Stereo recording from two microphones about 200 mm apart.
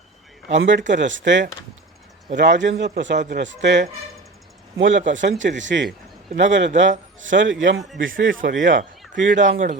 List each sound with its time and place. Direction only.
0.5 s a man's voice: 65° right (ahead or behind)
8.4 s speech: 40° right (ahead or behind)